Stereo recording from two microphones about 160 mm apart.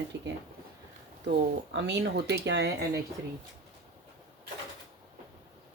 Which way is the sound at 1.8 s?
90° right.